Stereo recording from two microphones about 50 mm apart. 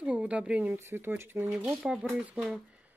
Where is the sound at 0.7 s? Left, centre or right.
Right.